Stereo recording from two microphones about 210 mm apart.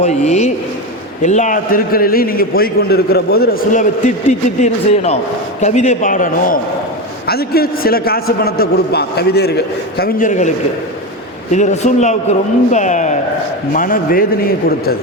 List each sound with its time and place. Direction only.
0.0 s a man's voice: 30° left (ahead or behind)
11.5 s a man's voice: 35° left (ahead or behind)